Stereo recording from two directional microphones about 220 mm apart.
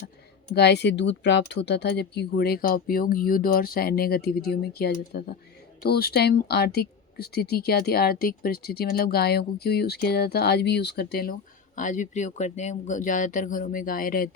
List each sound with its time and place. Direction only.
0.5 s speech: 50° left (ahead or behind)